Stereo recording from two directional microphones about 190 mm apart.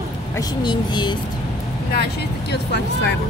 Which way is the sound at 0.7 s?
25° left (ahead or behind).